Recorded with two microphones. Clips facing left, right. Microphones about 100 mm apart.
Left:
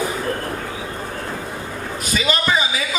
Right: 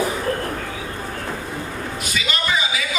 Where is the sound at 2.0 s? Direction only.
35° left (ahead or behind).